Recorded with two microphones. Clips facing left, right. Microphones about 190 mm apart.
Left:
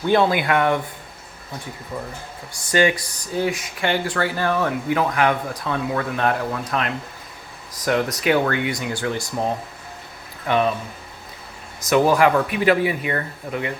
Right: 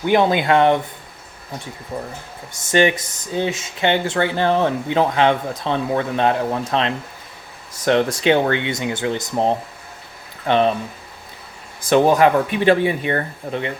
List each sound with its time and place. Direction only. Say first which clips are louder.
0.0 s speech: right 2 dB; 15° right (ahead or behind)
1.9 s speech: right 3 dB; 25° right (ahead or behind)
11.9 s speech: right 2 dB; 25° right (ahead or behind)